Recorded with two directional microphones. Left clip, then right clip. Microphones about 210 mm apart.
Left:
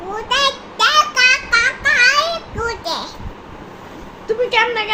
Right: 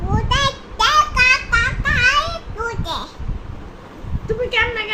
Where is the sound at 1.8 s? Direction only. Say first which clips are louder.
Left 5 dB; 5° right (ahead or behind).